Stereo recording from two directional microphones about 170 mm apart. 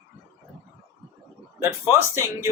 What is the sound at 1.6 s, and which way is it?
Speech, 15° right (ahead or behind).